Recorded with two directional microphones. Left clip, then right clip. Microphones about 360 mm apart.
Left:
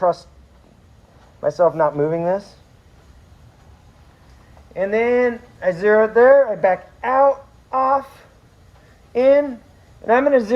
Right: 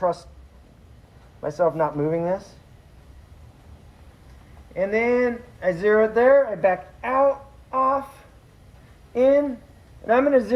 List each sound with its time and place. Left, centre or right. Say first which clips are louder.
0.0 s speech: left 5 dB; left
1.4 s speech: left 5 dB; left
4.7 s speech: left 3 dB; centre
7.8 s a sound: left 4 dB; centre
9.1 s speech: left 4 dB; left